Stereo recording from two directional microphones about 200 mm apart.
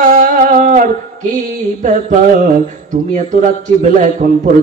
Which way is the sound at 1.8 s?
40° right (ahead or behind).